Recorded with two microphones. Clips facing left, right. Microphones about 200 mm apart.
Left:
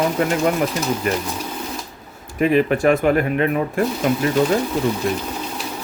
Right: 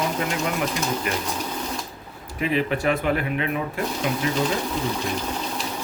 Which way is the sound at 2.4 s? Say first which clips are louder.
Left 7 dB; 50° left (ahead or behind).